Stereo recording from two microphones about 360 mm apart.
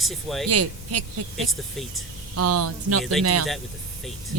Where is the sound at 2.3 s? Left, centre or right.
Right.